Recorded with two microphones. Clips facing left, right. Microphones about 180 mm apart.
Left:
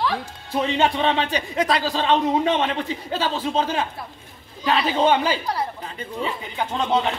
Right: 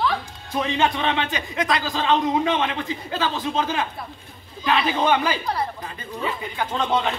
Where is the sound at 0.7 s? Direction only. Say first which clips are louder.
Left 2 dB; 30° left (ahead or behind).